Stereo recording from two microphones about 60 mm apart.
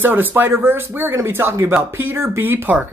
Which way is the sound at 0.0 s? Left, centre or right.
Right.